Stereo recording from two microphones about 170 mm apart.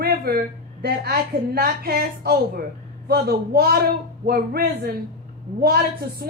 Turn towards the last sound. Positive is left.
turn(degrees=-65)  # may be behind; listen again after turning